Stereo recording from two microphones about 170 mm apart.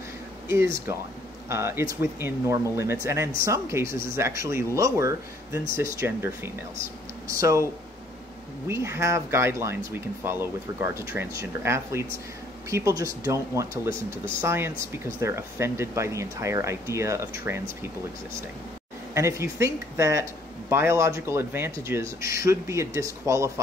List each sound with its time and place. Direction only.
1.5 s speech: 15° right (ahead or behind)
8.6 s speech: 15° right (ahead or behind)
19.1 s speech: 15° right (ahead or behind)